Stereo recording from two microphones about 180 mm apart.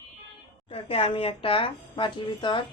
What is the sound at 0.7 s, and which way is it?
Speech, 30° left (ahead or behind).